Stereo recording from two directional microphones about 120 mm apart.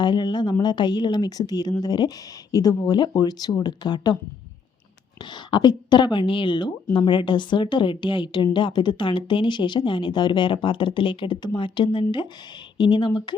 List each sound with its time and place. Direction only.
0.0 s speech: 40° left (ahead or behind)
5.5 s speech: 40° left (ahead or behind)